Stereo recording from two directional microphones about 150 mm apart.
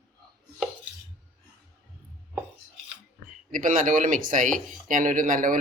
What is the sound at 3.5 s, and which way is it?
Speech, 65° right (ahead or behind).